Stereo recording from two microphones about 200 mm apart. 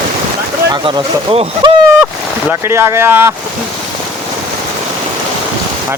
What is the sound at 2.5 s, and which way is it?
Speech, 10° right (ahead or behind).